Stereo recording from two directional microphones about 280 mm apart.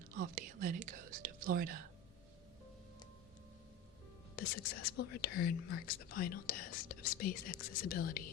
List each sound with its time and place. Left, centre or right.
0.1 s whispering: right
4.4 s speech: left